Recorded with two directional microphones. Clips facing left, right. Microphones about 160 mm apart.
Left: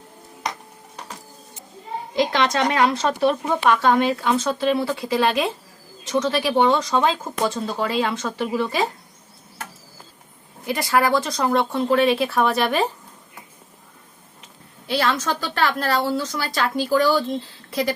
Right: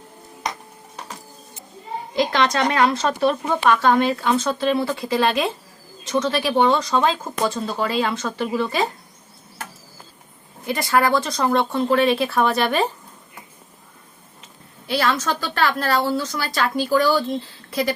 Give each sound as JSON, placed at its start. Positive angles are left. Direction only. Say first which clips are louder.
{"t": 2.1, "sound": "speech", "louder": "even", "side_deg": 20}
{"t": 10.7, "sound": "speech", "louder": "right 1 dB", "side_deg": 15}
{"t": 14.8, "sound": "a woman's voice", "louder": "right 1 dB", "side_deg": 20}